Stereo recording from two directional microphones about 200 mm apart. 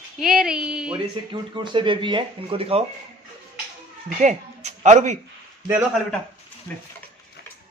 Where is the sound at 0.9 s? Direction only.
25° right (ahead or behind).